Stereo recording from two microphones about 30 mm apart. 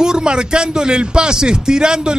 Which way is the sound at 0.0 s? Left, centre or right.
Right.